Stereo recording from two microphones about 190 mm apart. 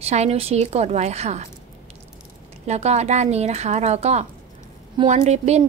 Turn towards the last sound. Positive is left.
turn(degrees=-35)  # may be behind; listen again after turning